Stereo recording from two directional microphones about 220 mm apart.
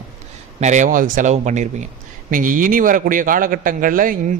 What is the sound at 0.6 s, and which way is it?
A man's voice, 35° right (ahead or behind).